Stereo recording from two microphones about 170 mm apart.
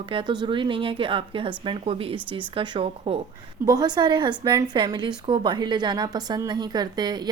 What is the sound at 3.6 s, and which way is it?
A woman's voice, 25° right (ahead or behind).